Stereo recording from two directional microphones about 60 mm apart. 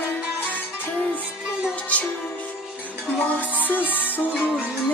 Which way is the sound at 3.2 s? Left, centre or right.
Left.